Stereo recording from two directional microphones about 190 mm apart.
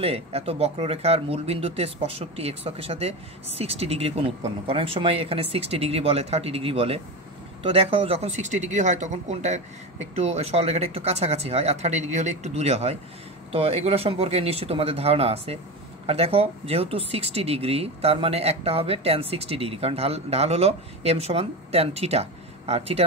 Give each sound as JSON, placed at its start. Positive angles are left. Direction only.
{"t": 0.0, "sound": "speech", "side_deg": -30}